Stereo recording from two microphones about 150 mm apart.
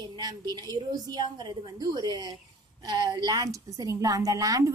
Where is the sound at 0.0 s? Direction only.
30° right (ahead or behind).